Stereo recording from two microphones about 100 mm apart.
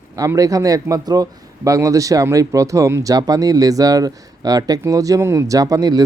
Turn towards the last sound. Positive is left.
turn(degrees=-40)  # may be behind; listen again after turning